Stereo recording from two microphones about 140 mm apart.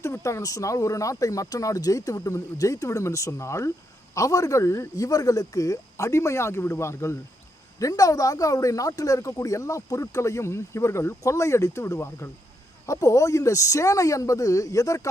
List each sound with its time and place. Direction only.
0.0 s speech: 20° left (ahead or behind)